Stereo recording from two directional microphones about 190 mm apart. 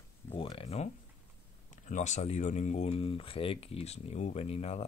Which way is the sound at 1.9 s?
40° left (ahead or behind).